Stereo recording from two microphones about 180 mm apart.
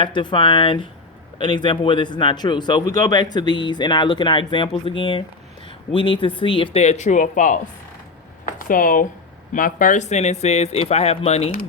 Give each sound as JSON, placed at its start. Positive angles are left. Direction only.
{"t": 0.0, "sound": "speech", "side_deg": 25}